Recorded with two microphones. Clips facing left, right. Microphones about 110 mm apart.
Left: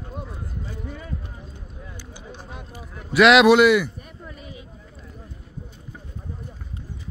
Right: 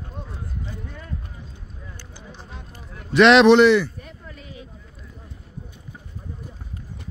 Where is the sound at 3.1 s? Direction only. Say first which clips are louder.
Right 1 dB; 5° left (ahead or behind).